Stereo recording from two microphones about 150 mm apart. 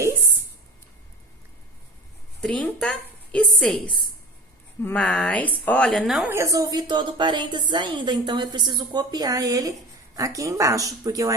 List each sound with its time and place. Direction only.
2.4 s a woman's voice: 5° left (ahead or behind)
6.2 s a woman's voice: 20° right (ahead or behind)